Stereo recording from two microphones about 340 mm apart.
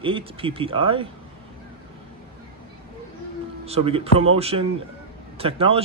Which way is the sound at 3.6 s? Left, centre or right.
Centre.